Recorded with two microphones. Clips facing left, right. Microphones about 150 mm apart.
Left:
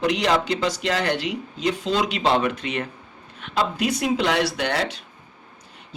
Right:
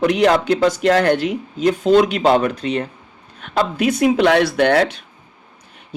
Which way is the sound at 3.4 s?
50° right (ahead or behind).